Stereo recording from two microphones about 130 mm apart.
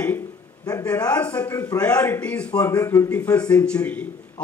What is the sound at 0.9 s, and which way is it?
Speech, 30° left (ahead or behind).